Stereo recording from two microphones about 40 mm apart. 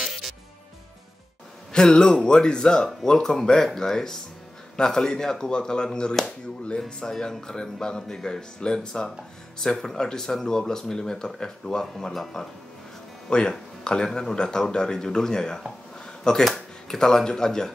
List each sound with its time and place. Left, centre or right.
1.7 s speech: centre
13.3 s speech: left